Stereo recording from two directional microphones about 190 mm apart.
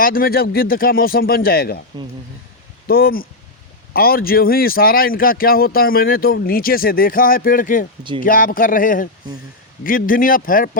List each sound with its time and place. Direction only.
0.0 s speech: 50° left (ahead or behind)
2.8 s speech: 50° left (ahead or behind)